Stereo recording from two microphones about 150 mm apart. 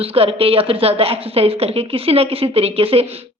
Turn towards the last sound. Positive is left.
turn(degrees=-40)  # may be behind; listen again after turning